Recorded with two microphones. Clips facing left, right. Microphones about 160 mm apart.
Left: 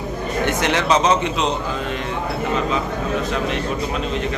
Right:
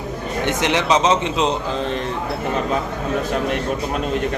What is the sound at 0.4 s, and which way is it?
A man's voice, 20° right (ahead or behind).